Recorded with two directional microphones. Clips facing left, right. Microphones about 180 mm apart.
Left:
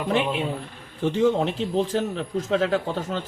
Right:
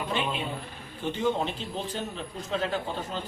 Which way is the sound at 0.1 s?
80° left.